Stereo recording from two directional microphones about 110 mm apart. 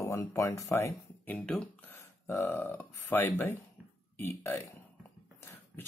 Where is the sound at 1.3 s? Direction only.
10° left (ahead or behind).